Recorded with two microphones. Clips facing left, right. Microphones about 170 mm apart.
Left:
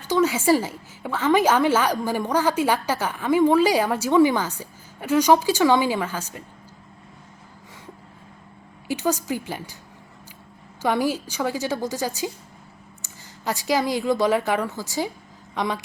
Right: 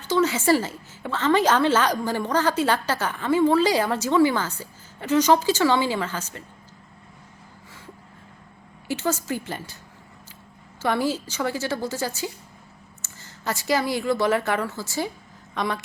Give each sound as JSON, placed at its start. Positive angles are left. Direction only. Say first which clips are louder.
{"t": 0.1, "sound": "a woman's voice", "louder": "left 1 dB", "side_deg": 10}
{"t": 8.9, "sound": "a woman's voice", "louder": "left 2 dB", "side_deg": 15}
{"t": 10.8, "sound": "a woman's voice", "louder": "left 1 dB", "side_deg": 15}